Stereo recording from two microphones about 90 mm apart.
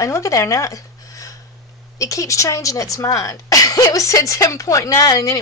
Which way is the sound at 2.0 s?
40° left (ahead or behind).